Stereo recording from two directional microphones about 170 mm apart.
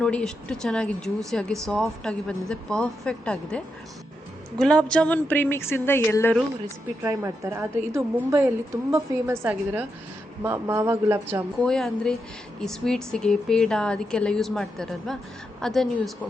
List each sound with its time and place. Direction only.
0.0 s speech: 5° left (ahead or behind)
4.6 s a woman's voice: 5° left (ahead or behind)
7.0 s a woman's voice: 15° right (ahead or behind)
11.6 s speech: 5° left (ahead or behind)